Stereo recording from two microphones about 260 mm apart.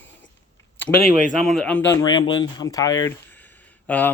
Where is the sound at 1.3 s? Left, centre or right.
Centre.